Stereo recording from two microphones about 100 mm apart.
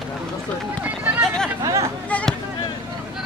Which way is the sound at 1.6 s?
30° right (ahead or behind).